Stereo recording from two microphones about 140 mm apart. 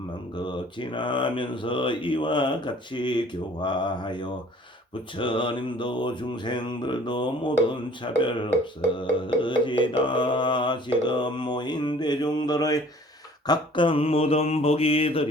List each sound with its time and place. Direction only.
0.3 s speech: 35° left (ahead or behind)
13.5 s mantra: 35° left (ahead or behind)